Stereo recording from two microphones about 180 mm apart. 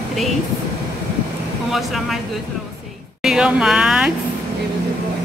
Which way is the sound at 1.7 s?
Centre (ahead or behind).